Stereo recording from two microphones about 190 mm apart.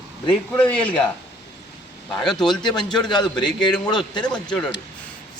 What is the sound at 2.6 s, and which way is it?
A man's voice, 25° left (ahead or behind).